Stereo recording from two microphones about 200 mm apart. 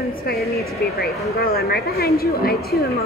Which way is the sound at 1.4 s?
50° left (ahead or behind).